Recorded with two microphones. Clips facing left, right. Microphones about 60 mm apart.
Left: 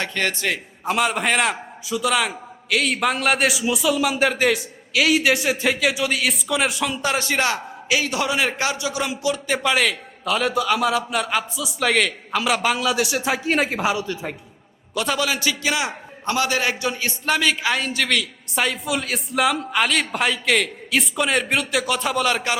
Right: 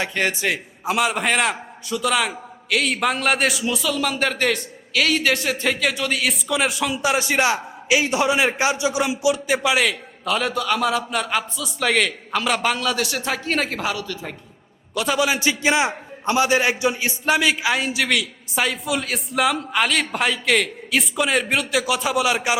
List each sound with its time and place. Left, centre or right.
0.0 s a man's voice: centre
9.6 s a man's voice: centre
14.0 s a man's voice: left
14.9 s a man's voice: centre
15.2 s a man's voice: right; by 22.5 s centre